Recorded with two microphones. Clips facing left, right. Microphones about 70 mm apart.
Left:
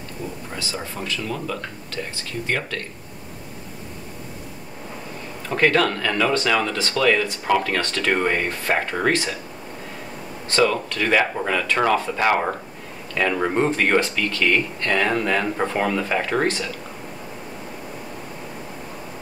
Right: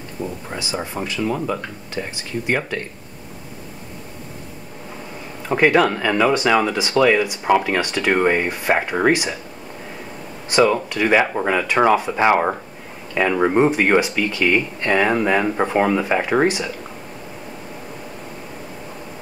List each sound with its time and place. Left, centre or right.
0.5 s speech: centre
5.5 s speech: centre
10.5 s speech: centre